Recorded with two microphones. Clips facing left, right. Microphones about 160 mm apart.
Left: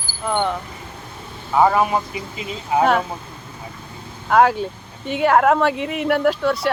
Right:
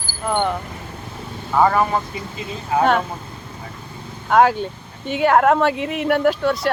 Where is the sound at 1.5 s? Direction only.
10° left (ahead or behind).